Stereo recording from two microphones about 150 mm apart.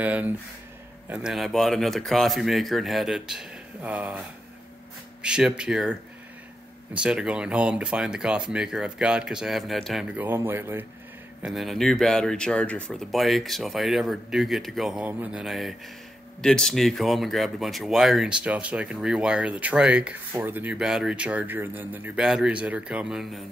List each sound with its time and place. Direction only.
0.0 s speech: 10° right (ahead or behind)
5.2 s speech: 5° right (ahead or behind)
7.0 s speech: 5° right (ahead or behind)
10.1 s speech: 15° right (ahead or behind)
11.4 s speech: centre (ahead or behind)